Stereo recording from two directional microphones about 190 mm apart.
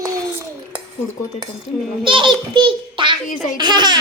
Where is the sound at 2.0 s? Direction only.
25° right (ahead or behind).